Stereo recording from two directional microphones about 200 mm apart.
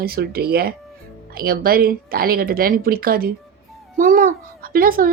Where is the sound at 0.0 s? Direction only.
50° right (ahead or behind).